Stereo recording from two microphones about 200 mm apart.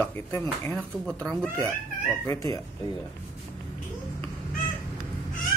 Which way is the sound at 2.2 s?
15° left (ahead or behind).